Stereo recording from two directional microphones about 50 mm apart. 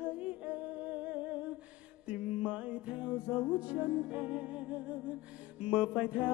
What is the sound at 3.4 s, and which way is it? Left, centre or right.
Mantra, right.